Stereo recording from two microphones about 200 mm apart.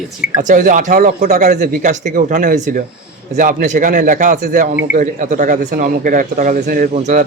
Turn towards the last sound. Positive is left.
turn(degrees=-40)  # may be behind; listen again after turning